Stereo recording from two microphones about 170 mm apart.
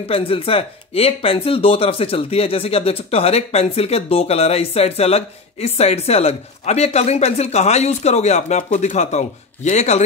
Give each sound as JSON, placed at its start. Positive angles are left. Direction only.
{"t": 0.1, "sound": "speech", "side_deg": 35}